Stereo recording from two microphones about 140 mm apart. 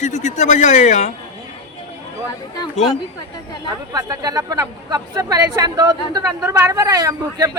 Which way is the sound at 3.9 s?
25° right (ahead or behind).